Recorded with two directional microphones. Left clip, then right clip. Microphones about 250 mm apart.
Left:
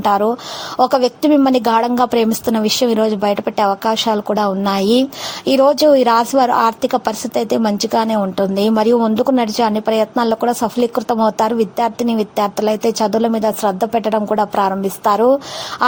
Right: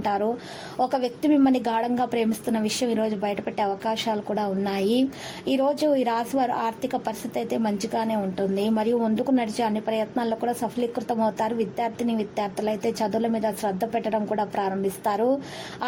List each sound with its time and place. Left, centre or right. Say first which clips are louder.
0.0 s a woman's voice: left 10 dB; centre